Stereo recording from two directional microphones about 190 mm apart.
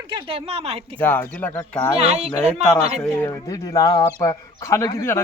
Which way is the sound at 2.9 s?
5° left (ahead or behind).